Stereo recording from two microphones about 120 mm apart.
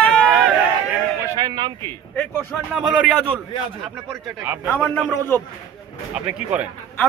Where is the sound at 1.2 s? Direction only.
30° right (ahead or behind).